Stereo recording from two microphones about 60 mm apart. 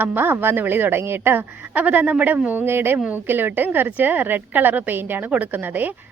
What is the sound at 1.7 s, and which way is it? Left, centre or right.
Speech, right.